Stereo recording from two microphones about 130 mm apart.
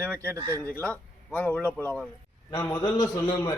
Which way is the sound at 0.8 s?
10° left (ahead or behind).